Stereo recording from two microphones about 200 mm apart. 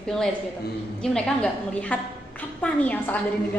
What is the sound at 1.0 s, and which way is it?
A woman's voice, 5° left (ahead or behind).